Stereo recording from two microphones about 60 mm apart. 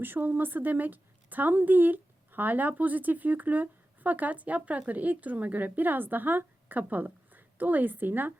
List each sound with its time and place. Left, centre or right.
0.0 s a woman's voice: right